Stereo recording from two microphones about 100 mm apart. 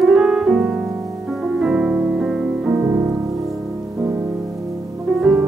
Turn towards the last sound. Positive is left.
turn(degrees=-5)  # may be behind; listen again after turning